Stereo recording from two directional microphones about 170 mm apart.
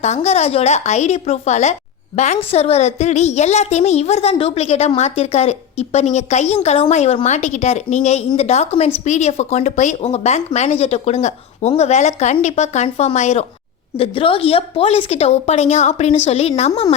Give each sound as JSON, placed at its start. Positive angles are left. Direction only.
{"t": 0.0, "sound": "a woman's voice", "side_deg": 40}